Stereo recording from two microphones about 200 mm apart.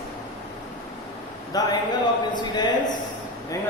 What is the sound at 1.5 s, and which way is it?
Speech, 20° left (ahead or behind).